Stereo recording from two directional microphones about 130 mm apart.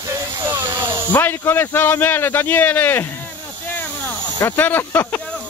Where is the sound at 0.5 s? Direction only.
30° right (ahead or behind).